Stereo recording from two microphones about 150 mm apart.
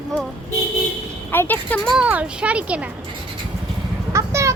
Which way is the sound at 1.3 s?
10° left (ahead or behind).